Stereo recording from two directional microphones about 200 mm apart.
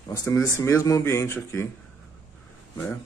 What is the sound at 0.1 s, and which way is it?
Speech, 15° left (ahead or behind).